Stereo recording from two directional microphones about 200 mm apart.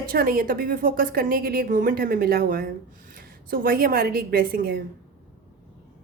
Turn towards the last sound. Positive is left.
turn(degrees=-50)  # may be behind; listen again after turning